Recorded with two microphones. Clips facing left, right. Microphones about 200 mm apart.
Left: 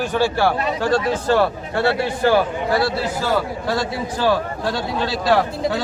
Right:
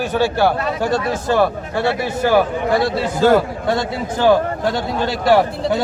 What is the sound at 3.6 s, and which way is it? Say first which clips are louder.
A man's voice: right 3 dB; 20° right (ahead or behind).